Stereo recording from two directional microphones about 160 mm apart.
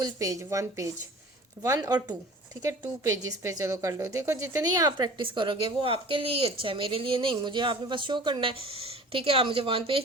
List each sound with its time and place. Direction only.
0.0 s a woman's voice: 20° right (ahead or behind)